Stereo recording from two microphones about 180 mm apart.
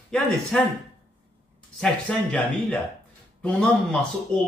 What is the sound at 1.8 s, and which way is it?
A man's voice, 5° left (ahead or behind).